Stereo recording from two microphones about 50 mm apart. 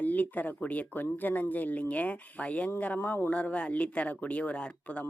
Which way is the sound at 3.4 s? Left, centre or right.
Left.